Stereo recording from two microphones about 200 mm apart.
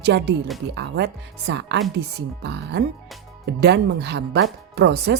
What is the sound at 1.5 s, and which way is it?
Speech, 60° right (ahead or behind).